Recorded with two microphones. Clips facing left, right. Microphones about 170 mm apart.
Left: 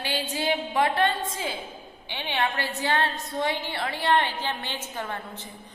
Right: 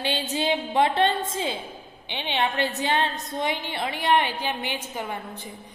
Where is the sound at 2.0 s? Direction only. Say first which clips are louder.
Right 2 dB; 20° right (ahead or behind).